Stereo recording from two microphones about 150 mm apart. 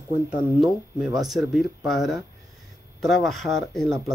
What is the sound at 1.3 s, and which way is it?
Speech, centre (ahead or behind).